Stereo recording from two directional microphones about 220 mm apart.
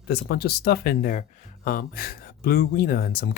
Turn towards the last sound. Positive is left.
turn(degrees=45)  # may be behind; listen again after turning